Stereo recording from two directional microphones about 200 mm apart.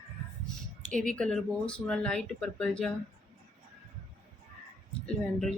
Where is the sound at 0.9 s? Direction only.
40° right (ahead or behind).